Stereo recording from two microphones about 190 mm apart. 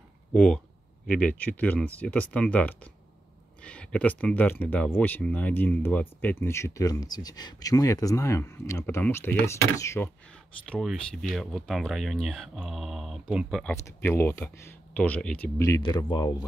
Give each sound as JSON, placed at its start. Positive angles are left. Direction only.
{"t": 0.3, "sound": "speech", "side_deg": 5}
{"t": 10.7, "sound": "speech", "side_deg": 0}
{"t": 13.8, "sound": "speech", "side_deg": 15}